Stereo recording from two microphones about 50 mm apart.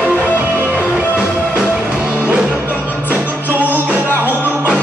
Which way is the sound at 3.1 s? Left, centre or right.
Right.